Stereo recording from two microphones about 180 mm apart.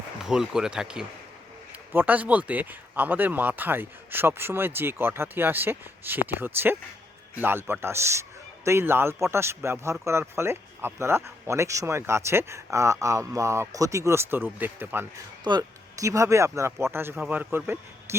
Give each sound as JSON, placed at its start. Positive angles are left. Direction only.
{"t": 0.3, "sound": "speech", "side_deg": -5}
{"t": 15.4, "sound": "speech", "side_deg": -20}